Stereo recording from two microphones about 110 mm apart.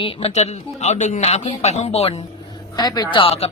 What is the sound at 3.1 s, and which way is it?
Speech, 60° left (ahead or behind).